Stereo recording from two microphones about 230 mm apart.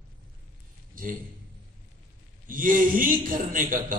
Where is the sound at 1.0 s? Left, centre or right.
Right.